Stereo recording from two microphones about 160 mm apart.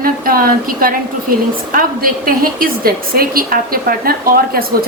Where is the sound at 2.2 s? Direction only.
65° right (ahead or behind).